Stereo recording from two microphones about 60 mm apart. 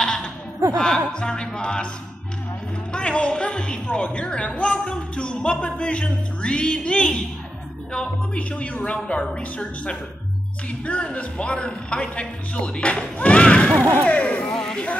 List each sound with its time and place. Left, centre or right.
0.0 s chuckle: centre
0.7 s speech: centre
2.9 s a man's voice: centre